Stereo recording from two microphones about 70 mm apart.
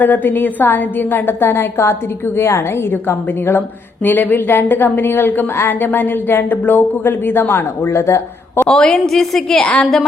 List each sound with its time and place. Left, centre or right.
0.0 s a woman's voice: left
8.7 s a woman's voice: centre